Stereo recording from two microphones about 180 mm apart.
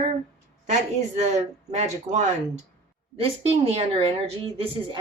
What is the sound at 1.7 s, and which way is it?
Speech, 40° right (ahead or behind).